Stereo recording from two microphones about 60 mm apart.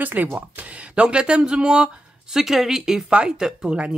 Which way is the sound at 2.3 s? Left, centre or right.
Centre.